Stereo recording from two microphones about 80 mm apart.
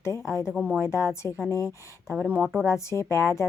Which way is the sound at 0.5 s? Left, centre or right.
Centre.